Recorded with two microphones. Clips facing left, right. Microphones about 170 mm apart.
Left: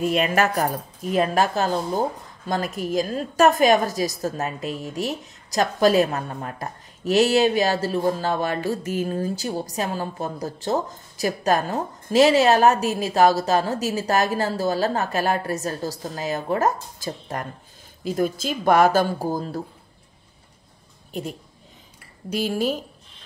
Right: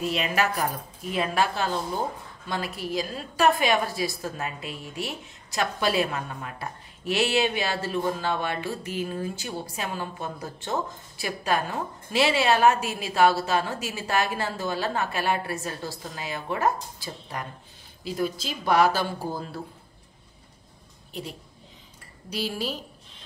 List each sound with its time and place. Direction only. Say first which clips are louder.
0.0 s speech: left 5 dB; 50° left (ahead or behind)
21.1 s a woman's voice: left 6 dB; 45° left (ahead or behind)